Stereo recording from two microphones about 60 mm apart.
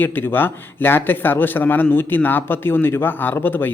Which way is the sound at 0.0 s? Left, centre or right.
Left.